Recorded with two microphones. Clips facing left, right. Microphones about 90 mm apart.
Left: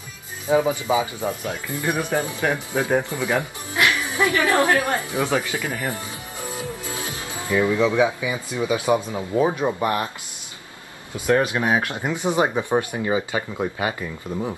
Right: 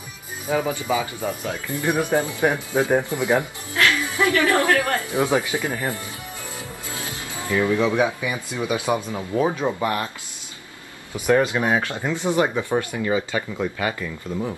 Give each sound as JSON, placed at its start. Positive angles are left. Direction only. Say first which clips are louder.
{"t": 0.5, "sound": "speech", "louder": "left 3 dB", "side_deg": 20}
{"t": 1.8, "sound": "speech", "louder": "right 3 dB", "side_deg": -20}
{"t": 3.7, "sound": "speech", "louder": "even", "side_deg": 20}
{"t": 5.1, "sound": "speech", "louder": "right 2 dB", "side_deg": -15}
{"t": 6.9, "sound": "music", "louder": "left 2 dB", "side_deg": 20}
{"t": 8.0, "sound": "speech", "louder": "left 1 dB", "side_deg": 20}
{"t": 11.4, "sound": "speech", "louder": "even", "side_deg": 15}